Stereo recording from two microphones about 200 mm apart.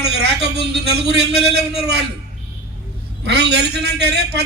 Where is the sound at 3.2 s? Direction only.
55° right (ahead or behind).